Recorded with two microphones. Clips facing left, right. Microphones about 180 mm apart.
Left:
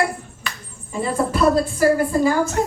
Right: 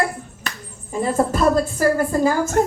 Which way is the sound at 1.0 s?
45° right (ahead or behind).